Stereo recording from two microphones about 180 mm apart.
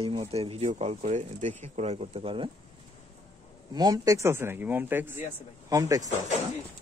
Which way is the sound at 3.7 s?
20° right (ahead or behind).